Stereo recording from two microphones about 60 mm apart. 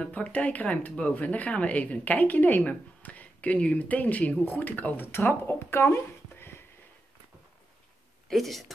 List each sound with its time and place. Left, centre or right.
0.0 s speech: left
8.3 s speech: centre